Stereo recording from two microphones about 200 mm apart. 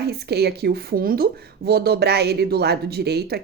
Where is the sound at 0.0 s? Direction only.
55° right (ahead or behind).